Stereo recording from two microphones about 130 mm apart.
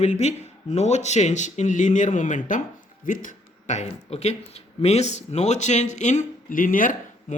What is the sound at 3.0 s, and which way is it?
Speech, 90° left.